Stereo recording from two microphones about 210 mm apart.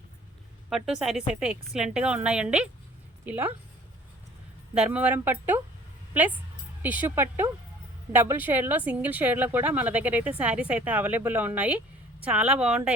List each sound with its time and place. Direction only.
0.7 s a woman's voice: centre (ahead or behind)
4.7 s a woman's voice: 5° right (ahead or behind)
6.8 s a woman's voice: 10° right (ahead or behind)